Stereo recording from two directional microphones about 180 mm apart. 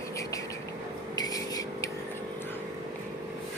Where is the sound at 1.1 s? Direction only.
20° left (ahead or behind).